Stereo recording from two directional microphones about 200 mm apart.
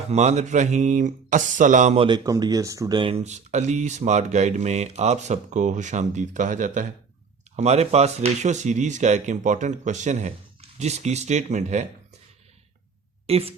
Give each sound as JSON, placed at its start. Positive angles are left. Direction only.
{"t": 0.1, "sound": "speech", "side_deg": -35}
{"t": 13.2, "sound": "speech", "side_deg": -30}